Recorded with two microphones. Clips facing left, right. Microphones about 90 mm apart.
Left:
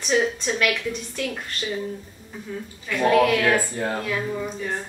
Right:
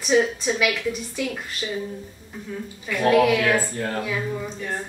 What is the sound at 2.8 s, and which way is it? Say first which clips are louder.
Speech: right 1 dB; 5° right (ahead or behind).